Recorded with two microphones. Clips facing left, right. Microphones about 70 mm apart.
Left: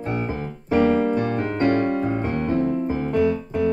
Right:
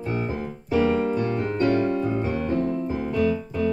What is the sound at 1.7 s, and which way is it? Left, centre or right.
Piano, left.